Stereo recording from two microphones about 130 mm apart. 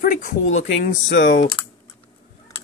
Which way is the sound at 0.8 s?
90° left.